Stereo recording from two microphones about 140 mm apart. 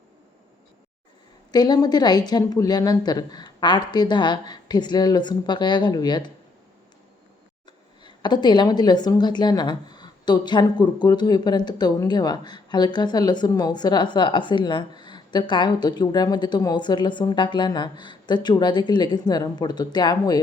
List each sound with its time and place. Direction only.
1.5 s a woman's voice: 30° left (ahead or behind)
8.0 s a woman's voice: 30° left (ahead or behind)